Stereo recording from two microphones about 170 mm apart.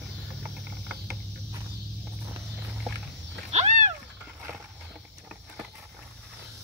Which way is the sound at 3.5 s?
40° right (ahead or behind).